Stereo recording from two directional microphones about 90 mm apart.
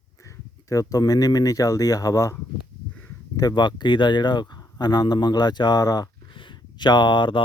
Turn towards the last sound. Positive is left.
turn(degrees=60)  # may be behind; listen again after turning